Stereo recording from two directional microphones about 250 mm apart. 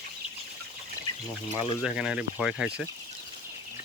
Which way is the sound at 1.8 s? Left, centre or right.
Centre.